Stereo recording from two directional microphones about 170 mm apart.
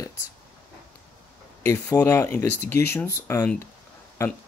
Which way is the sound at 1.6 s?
10° left (ahead or behind).